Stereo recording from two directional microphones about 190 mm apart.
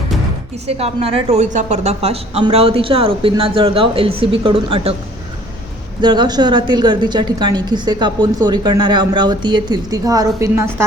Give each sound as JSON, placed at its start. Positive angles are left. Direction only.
{"t": 0.7, "sound": "a woman's voice", "side_deg": -30}
{"t": 6.0, "sound": "a woman's voice", "side_deg": -25}